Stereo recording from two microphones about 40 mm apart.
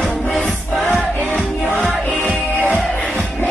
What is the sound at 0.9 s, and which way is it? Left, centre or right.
Music, left.